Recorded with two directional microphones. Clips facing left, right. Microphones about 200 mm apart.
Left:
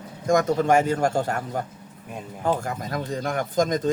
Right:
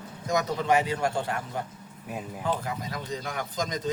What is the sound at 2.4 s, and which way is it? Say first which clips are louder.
Speech: left 6 dB; 45° left (ahead or behind).